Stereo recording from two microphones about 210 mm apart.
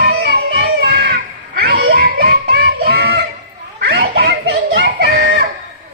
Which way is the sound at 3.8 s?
50° right (ahead or behind).